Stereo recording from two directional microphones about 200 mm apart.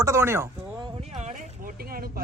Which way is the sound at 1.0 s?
35° right (ahead or behind).